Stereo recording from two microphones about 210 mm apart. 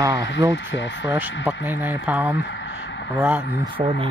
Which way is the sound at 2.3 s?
55° left (ahead or behind).